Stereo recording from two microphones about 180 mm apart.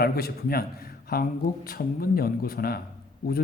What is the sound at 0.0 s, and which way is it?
A man's voice, 60° left (ahead or behind).